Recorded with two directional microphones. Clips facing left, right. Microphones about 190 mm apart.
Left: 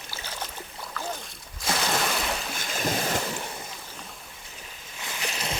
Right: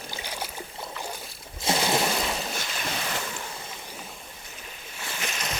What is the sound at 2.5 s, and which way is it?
Waves, 45° left (ahead or behind).